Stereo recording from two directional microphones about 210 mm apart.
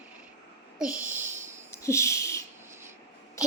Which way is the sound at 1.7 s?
15° left (ahead or behind).